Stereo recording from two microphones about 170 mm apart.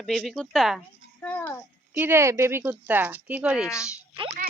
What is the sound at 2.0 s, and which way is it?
Speech, 15° right (ahead or behind).